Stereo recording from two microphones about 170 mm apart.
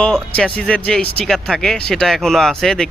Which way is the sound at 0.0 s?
5° left (ahead or behind).